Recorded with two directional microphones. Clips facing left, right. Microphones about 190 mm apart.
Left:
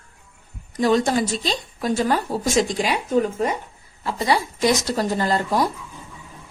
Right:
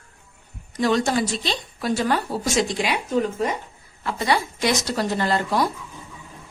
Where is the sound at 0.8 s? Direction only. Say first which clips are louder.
Left 2 dB; 40° left (ahead or behind).